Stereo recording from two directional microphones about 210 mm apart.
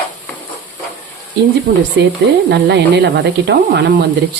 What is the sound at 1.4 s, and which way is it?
Speech, 50° right (ahead or behind).